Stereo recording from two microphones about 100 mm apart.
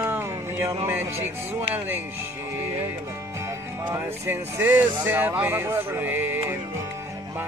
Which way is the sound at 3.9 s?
20° right (ahead or behind).